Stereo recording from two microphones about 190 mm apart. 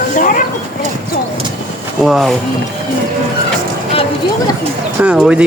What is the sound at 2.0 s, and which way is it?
Speech, centre (ahead or behind).